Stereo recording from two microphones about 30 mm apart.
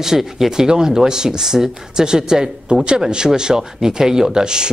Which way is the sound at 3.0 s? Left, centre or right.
Right.